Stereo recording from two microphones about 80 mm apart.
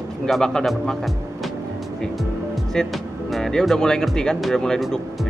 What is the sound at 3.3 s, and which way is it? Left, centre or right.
Speech, centre.